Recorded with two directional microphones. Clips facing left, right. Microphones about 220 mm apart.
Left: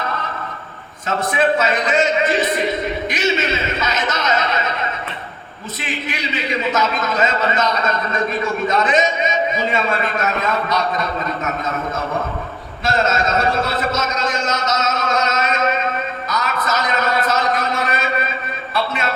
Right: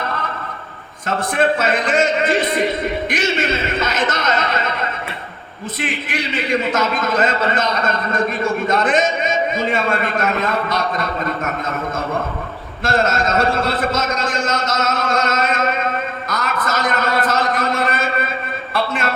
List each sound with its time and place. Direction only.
1.0 s a man's voice: 50° right (ahead or behind)
5.8 s a man's voice: 50° right (ahead or behind)
12.8 s a man's voice: 50° right (ahead or behind)
16.3 s a sound: 50° right (ahead or behind)